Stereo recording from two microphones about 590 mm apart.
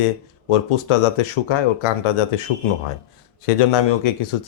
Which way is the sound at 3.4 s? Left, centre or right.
Left.